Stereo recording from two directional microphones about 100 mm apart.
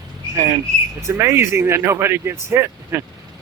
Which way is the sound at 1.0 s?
30° right (ahead or behind).